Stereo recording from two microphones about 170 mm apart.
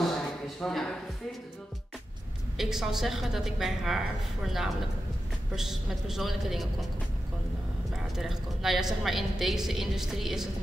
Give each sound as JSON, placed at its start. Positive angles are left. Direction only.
{"t": 0.6, "sound": "speech", "side_deg": 5}
{"t": 2.5, "sound": "a woman's voice", "side_deg": 0}
{"t": 7.9, "sound": "a woman's voice", "side_deg": 0}